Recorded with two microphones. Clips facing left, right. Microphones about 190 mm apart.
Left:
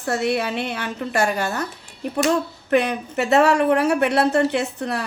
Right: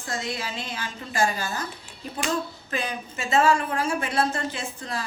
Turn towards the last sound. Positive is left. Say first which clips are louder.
# left 9 dB
turn(degrees=65)  # may be behind; listen again after turning